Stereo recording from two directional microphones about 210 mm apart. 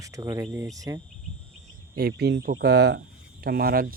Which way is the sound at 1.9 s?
50° right (ahead or behind).